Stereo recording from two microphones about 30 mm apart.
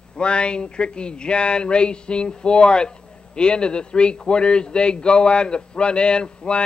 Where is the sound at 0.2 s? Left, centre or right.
Left.